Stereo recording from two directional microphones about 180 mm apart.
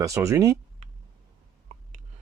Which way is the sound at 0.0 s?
15° right (ahead or behind).